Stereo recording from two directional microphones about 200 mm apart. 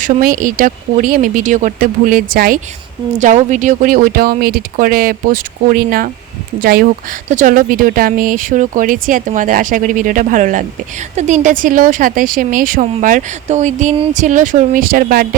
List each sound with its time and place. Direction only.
0.0 s speech: 45° right (ahead or behind)